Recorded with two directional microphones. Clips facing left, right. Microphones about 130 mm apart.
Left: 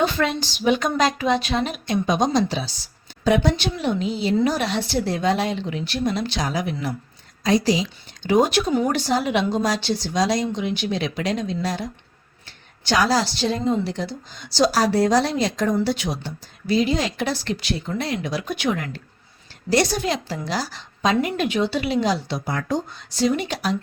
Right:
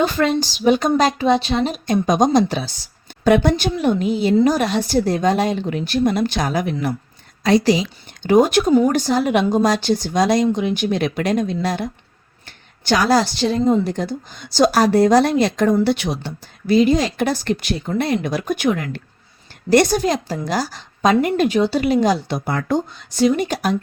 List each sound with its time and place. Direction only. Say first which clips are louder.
0.0 s a woman's voice: right 4 dB; 40° right (ahead or behind)
7.4 s a woman's voice: right 4 dB; 65° right (ahead or behind)
8.2 s a woman's voice: right 4 dB; 50° right (ahead or behind)